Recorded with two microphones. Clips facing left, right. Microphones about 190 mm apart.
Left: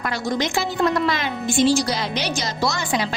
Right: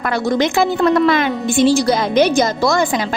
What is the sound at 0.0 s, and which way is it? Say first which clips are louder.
A woman's voice: right 7 dB; 60° right (ahead or behind).